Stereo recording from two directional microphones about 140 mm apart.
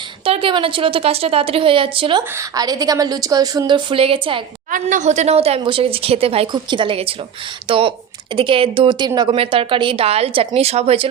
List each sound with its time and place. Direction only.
0.3 s a woman's voice: 40° right (ahead or behind)
2.3 s speech: 25° right (ahead or behind)
4.7 s a woman's voice: 65° right (ahead or behind); by 9.3 s 30° right (ahead or behind)
9.3 s a woman's voice: 40° right (ahead or behind)